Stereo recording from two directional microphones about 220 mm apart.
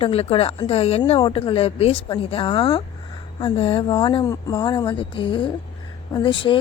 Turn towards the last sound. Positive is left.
turn(degrees=25)  # may be behind; listen again after turning